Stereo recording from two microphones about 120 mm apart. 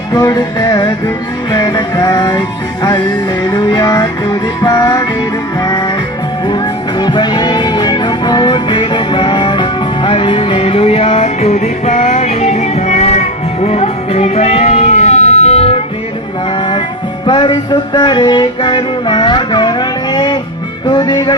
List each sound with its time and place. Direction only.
0.1 s music: 35° left (ahead or behind)
3.5 s music: 35° left (ahead or behind)
7.0 s music: 40° left (ahead or behind); by 15.8 s 55° left (ahead or behind)
17.2 s music: 40° left (ahead or behind)